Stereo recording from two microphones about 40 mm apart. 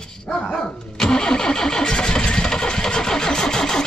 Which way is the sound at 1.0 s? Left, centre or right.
Centre.